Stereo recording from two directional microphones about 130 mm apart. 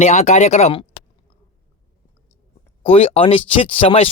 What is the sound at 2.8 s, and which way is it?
Speech, 50° left (ahead or behind).